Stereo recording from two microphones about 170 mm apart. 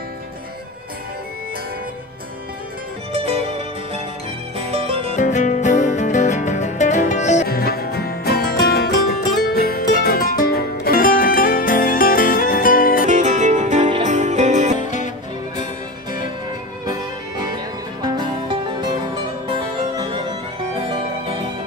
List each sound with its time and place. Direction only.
3.1 s music: 35° right (ahead or behind)
5.1 s music: 45° left (ahead or behind)
7.4 s music: 65° left (ahead or behind)
13.0 s music: 45° right (ahead or behind)
16.8 s music: 25° right (ahead or behind)